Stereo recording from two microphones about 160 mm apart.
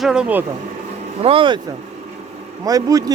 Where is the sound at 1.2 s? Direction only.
35° right (ahead or behind).